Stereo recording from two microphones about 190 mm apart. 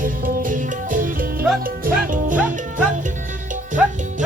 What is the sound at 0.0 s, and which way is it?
Music, 45° right (ahead or behind).